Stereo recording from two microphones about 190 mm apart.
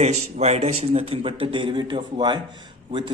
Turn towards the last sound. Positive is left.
turn(degrees=-25)  # may be behind; listen again after turning